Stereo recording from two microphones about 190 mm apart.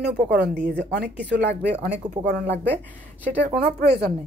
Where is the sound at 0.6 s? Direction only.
60° right (ahead or behind).